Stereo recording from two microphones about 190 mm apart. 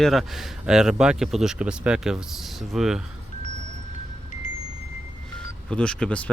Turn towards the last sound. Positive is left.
turn(degrees=5)  # may be behind; listen again after turning